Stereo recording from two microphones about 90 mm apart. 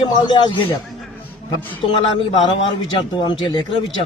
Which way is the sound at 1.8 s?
70° left (ahead or behind).